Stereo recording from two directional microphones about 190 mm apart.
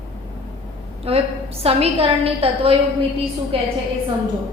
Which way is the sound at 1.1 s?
30° right (ahead or behind).